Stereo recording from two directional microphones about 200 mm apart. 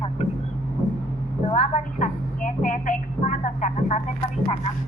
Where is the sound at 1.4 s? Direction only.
40° left (ahead or behind).